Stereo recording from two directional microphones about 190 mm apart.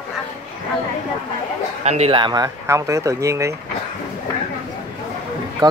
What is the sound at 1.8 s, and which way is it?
Speech, 35° right (ahead or behind).